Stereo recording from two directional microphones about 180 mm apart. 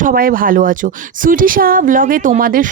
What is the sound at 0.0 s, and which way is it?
A woman's voice, 55° right (ahead or behind).